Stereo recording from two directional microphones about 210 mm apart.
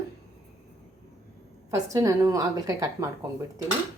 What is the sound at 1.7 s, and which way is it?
Speech, 15° right (ahead or behind).